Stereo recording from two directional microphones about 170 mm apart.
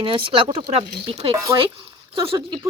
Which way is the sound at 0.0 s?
30° right (ahead or behind).